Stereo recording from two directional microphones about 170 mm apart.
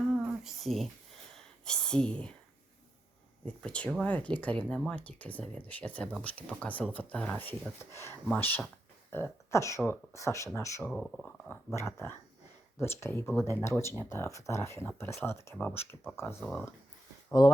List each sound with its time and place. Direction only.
0.1 s a sound: 5° right (ahead or behind)
1.6 s speech: 5° left (ahead or behind)
3.4 s speech: 5° left (ahead or behind)
10.9 s speech: 5° left (ahead or behind)